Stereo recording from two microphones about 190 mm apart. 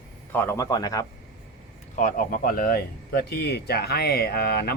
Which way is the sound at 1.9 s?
45° left (ahead or behind).